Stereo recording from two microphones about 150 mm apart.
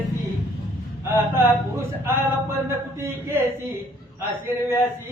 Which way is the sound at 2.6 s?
15° right (ahead or behind).